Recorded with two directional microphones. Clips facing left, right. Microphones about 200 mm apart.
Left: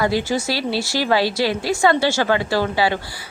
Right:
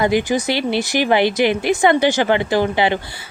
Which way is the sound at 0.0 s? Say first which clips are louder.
Right 3 dB; 15° right (ahead or behind).